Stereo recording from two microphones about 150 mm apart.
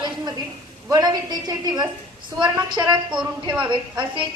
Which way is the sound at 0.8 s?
25° right (ahead or behind).